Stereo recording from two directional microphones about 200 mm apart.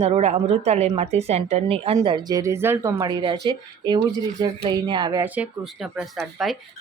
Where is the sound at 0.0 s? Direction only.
30° right (ahead or behind); by 2.9 s 10° right (ahead or behind).